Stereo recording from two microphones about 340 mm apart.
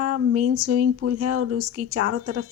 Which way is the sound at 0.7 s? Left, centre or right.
Right.